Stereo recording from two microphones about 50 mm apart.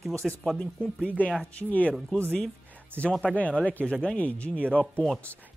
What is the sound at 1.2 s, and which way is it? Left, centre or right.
Speech, left.